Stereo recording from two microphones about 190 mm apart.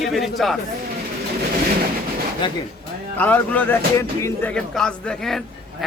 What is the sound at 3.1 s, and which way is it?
Speech, 10° left (ahead or behind).